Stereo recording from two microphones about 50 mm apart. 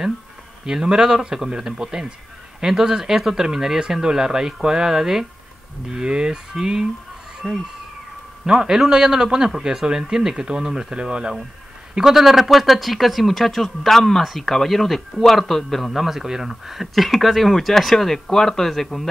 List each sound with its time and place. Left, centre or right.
0.7 s a man's voice: centre
7.4 s speech: centre
8.5 s a man's voice: centre